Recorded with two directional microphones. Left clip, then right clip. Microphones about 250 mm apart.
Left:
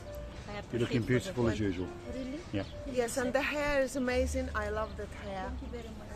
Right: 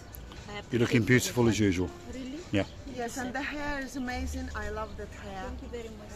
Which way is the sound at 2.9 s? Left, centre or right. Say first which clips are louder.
Left 4 dB; left.